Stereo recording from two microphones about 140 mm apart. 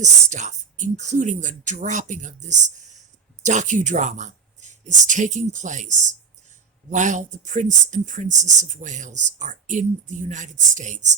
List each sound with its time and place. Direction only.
0.3 s speech: 60° right (ahead or behind)